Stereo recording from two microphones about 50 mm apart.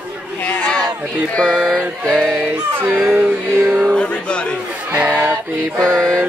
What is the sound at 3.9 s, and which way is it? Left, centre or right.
Music, centre.